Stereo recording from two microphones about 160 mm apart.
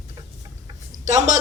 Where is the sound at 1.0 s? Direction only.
50° right (ahead or behind).